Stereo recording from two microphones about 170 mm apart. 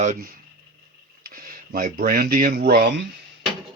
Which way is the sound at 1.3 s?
60° right (ahead or behind).